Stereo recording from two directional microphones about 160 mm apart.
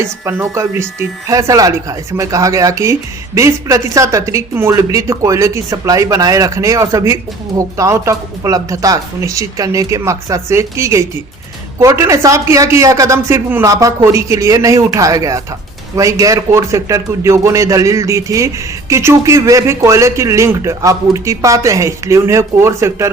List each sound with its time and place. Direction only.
0.0 s speech: 15° right (ahead or behind)